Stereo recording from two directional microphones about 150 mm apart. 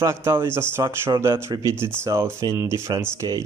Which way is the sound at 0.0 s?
15° right (ahead or behind).